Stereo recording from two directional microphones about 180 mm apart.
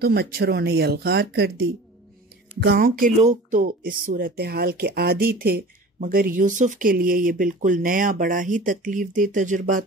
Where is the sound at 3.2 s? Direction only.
45° right (ahead or behind).